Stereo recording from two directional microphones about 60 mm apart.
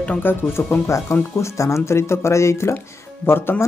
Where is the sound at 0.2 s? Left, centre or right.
Left.